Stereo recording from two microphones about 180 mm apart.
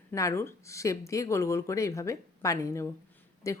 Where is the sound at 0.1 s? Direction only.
15° left (ahead or behind).